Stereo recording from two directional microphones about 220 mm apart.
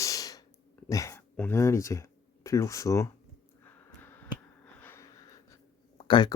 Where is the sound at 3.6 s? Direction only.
10° left (ahead or behind).